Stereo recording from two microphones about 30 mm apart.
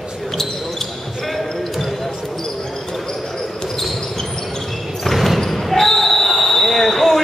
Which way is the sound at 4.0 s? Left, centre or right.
Centre.